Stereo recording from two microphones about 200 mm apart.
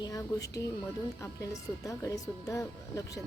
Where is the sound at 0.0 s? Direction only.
15° left (ahead or behind).